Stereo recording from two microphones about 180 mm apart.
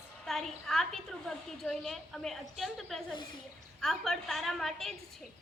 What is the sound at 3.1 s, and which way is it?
Speech, 25° left (ahead or behind).